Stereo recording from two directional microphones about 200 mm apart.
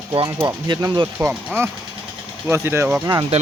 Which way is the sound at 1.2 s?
10° right (ahead or behind).